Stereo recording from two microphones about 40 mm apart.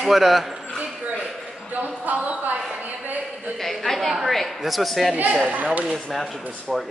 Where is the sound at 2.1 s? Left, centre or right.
Right.